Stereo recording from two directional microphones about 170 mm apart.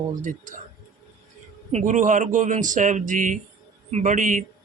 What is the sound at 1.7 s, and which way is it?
Speech, 50° right (ahead or behind).